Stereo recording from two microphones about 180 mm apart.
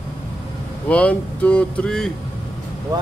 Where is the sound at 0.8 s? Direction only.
5° left (ahead or behind).